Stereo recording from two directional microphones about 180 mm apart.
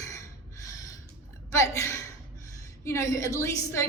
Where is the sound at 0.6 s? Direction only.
20° left (ahead or behind).